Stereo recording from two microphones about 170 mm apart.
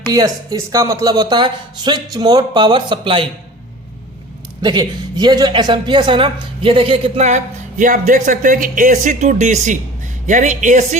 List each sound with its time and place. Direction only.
0.1 s speech: 20° right (ahead or behind)
4.6 s a woman's voice: 25° right (ahead or behind); by 10.8 s 45° right (ahead or behind)